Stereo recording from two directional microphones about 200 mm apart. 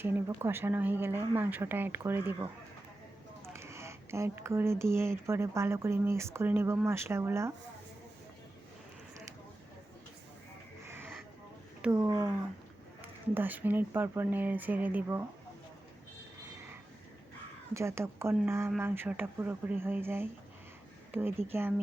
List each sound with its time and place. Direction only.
0.0 s speech: 10° right (ahead or behind)
10.8 s a sound: 10° right (ahead or behind)
11.8 s speech: 5° right (ahead or behind)
12.0 s speech: 20° right (ahead or behind)
17.7 s speech: 15° right (ahead or behind)